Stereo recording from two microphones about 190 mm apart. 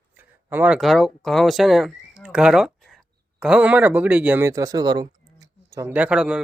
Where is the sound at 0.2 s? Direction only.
10° right (ahead or behind).